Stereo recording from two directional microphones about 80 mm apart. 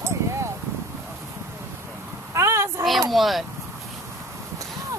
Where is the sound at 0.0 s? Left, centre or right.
Right.